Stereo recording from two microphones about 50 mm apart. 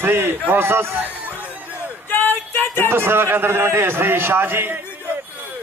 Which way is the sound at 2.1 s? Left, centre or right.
Left.